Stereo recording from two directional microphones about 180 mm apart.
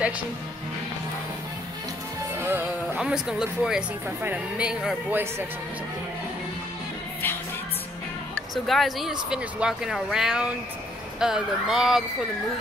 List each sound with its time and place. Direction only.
2.3 s speech: 10° right (ahead or behind)
8.6 s speech: centre (ahead or behind)